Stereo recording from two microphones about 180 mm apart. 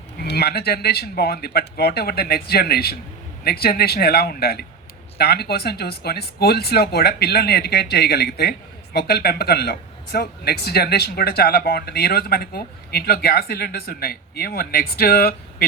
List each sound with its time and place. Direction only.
0.2 s speech: 65° left (ahead or behind)